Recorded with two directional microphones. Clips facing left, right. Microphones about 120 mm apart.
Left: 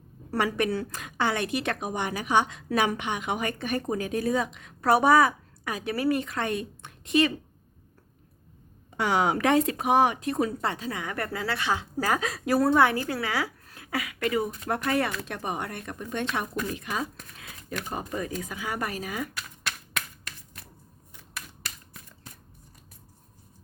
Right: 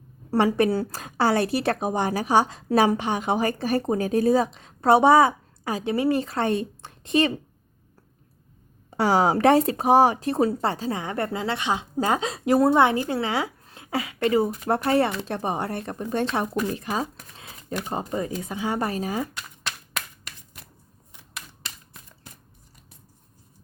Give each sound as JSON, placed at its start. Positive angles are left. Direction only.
{"t": 0.3, "sound": "a woman's voice", "side_deg": -30}
{"t": 8.9, "sound": "a woman's voice", "side_deg": -35}
{"t": 21.1, "sound": "typewriter", "side_deg": -20}